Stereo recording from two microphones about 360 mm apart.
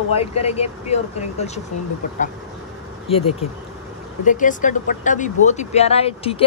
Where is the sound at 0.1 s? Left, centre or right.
Centre.